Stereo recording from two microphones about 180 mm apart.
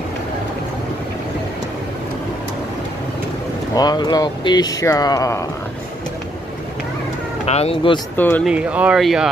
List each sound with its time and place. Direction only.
3.7 s speech: 20° left (ahead or behind)
7.4 s speech: 35° left (ahead or behind)
8.2 s speech: 10° left (ahead or behind)
8.5 s speech: 5° right (ahead or behind)